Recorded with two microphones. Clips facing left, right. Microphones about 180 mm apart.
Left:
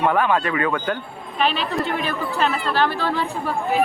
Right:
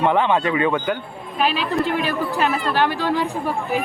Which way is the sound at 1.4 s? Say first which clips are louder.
Right 1 dB; 5° right (ahead or behind).